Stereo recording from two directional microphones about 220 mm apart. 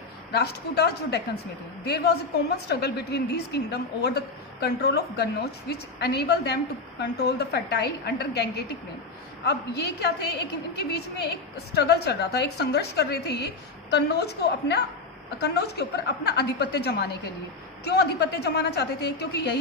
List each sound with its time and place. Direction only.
0.3 s a woman's voice: 45° left (ahead or behind)